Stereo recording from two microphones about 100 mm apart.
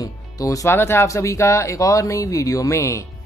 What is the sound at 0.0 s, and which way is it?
A man's voice, 35° left (ahead or behind).